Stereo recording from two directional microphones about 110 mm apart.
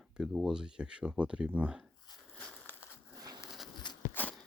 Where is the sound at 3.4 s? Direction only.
5° right (ahead or behind).